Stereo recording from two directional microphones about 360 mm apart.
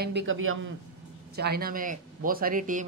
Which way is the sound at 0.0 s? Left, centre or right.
Right.